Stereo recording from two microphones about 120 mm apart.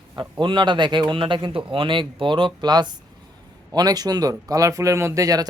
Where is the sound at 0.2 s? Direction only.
40° right (ahead or behind).